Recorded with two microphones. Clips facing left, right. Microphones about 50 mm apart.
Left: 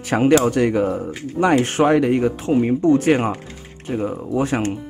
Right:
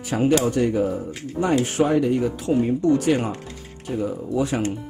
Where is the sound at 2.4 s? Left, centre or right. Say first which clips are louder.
Left 2 dB; left.